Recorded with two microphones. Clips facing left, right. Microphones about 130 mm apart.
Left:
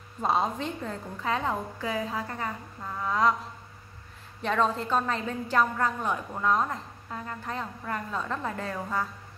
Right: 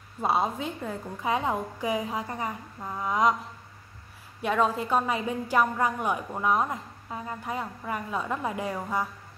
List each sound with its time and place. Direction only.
0.2 s a woman's voice: 5° right (ahead or behind)
4.4 s a woman's voice: 10° right (ahead or behind)